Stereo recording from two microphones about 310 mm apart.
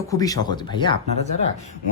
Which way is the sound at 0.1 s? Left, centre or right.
Centre.